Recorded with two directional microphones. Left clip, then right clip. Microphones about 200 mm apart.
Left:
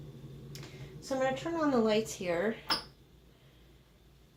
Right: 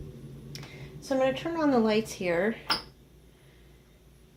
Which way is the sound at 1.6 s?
25° right (ahead or behind).